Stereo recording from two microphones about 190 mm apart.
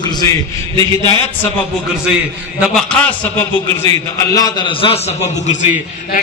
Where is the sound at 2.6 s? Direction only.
5° left (ahead or behind).